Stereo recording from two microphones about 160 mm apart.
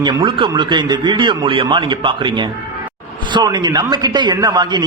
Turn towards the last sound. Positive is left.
turn(degrees=-25)  # may be behind; listen again after turning